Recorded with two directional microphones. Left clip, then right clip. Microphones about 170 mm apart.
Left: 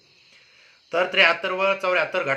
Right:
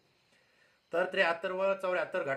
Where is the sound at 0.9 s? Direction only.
35° right (ahead or behind).